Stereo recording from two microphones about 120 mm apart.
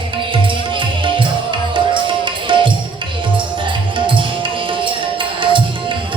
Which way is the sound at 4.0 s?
45° right (ahead or behind).